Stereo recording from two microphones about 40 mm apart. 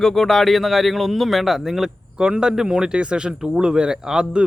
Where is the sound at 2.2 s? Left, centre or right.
Right.